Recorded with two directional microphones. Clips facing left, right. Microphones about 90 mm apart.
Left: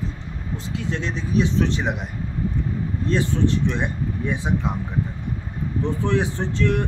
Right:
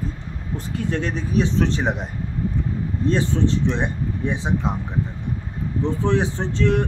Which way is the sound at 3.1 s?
25° right (ahead or behind).